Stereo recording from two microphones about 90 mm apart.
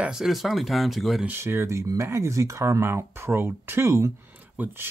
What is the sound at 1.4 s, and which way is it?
Speech, 30° right (ahead or behind).